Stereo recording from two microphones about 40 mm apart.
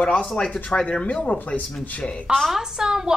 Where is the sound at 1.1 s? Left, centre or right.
Left.